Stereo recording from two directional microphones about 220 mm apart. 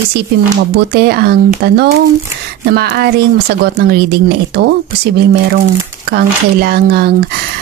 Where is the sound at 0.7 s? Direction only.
45° right (ahead or behind).